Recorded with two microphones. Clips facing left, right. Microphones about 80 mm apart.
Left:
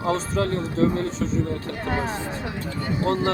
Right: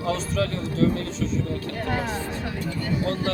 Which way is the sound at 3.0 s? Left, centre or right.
Left.